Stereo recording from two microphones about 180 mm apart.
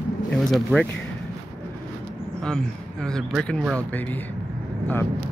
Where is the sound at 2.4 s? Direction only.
5° left (ahead or behind).